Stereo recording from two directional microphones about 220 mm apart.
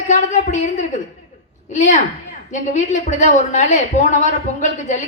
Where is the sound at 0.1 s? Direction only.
35° left (ahead or behind).